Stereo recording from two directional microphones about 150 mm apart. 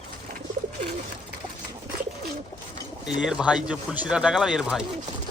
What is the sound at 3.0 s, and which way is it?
Speech, 5° right (ahead or behind).